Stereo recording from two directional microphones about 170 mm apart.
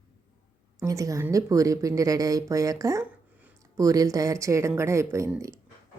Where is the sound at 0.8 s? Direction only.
20° right (ahead or behind).